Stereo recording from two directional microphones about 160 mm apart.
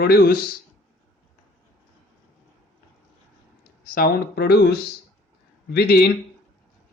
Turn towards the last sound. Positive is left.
turn(degrees=80)